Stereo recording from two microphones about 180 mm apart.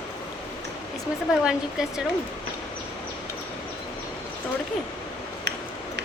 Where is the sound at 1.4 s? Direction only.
5° right (ahead or behind).